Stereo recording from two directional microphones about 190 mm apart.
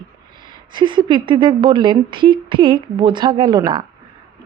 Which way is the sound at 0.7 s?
25° right (ahead or behind).